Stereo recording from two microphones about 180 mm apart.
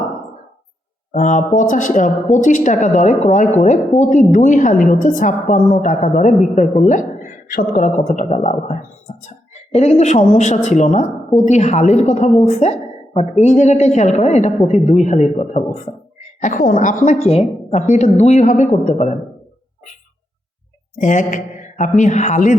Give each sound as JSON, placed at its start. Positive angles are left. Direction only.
{"t": 1.1, "sound": "a woman's voice", "side_deg": 45}
{"t": 21.0, "sound": "a woman's voice", "side_deg": 45}